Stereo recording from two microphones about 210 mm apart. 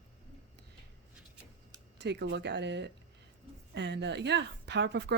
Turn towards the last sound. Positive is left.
turn(degrees=-55)  # may be behind; listen again after turning